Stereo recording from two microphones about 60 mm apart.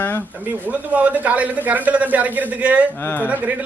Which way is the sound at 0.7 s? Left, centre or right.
Right.